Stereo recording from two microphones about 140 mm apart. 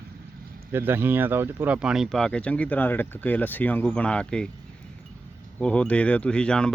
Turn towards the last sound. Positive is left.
turn(degrees=5)  # may be behind; listen again after turning